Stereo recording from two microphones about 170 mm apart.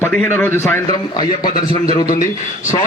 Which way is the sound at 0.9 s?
25° left (ahead or behind).